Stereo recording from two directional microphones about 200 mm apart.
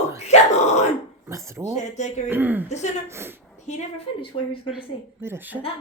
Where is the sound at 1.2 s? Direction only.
15° right (ahead or behind).